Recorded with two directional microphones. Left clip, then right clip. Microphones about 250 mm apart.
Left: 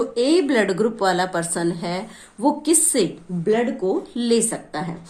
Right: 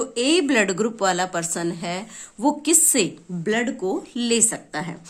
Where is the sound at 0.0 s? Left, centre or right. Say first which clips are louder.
Left 4 dB; right.